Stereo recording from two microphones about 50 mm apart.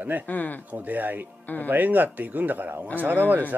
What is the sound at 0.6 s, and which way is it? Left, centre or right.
Speech, right.